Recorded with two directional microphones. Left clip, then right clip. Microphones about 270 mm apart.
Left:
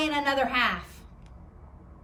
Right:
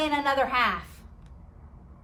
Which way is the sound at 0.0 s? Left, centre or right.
Centre.